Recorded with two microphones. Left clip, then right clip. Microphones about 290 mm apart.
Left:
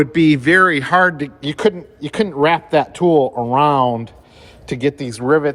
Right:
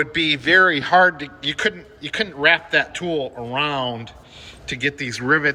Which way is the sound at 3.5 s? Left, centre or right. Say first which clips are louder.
Left 8 dB; left.